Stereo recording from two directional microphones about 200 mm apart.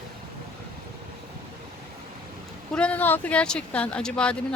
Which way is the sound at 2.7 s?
5° left (ahead or behind).